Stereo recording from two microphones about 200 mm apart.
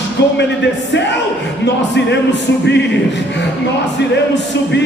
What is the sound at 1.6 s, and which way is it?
Speech, 60° left (ahead or behind).